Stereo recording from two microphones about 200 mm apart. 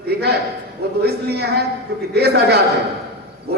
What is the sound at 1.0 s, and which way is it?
A man's voice, 55° right (ahead or behind).